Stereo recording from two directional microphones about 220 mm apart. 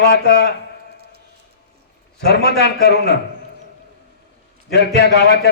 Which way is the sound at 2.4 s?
45° left (ahead or behind).